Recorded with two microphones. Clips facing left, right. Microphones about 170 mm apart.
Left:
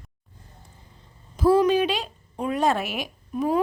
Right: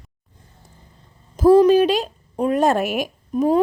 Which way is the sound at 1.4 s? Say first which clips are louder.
Right 7 dB; 40° right (ahead or behind).